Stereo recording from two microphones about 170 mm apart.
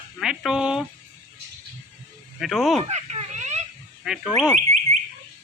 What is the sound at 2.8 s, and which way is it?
Baby laughter, 40° right (ahead or behind).